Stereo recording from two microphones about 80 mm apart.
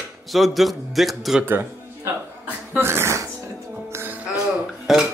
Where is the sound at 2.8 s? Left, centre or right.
Right.